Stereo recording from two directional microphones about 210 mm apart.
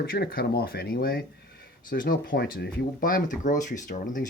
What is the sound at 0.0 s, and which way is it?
Speech, 45° left (ahead or behind).